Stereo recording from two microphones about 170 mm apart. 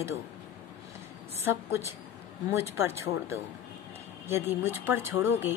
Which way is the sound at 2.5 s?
15° right (ahead or behind).